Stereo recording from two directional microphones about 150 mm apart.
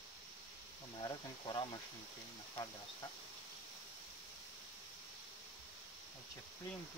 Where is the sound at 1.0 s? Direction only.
30° left (ahead or behind).